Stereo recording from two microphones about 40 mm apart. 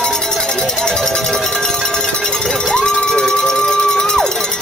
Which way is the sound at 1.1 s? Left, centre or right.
Centre.